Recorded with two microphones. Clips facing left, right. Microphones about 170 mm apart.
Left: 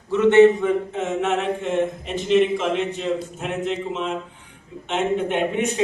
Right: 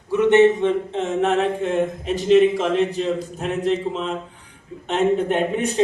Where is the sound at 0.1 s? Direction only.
15° right (ahead or behind).